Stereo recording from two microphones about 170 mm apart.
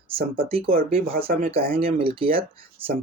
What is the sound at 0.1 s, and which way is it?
Speech, 35° right (ahead or behind).